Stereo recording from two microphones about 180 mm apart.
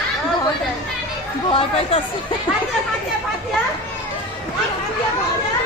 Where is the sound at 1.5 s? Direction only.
30° left (ahead or behind).